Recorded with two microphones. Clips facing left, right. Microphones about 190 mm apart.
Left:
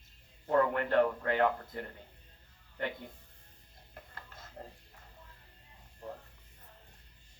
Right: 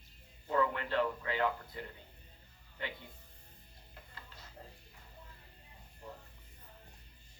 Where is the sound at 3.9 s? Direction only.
50° left (ahead or behind).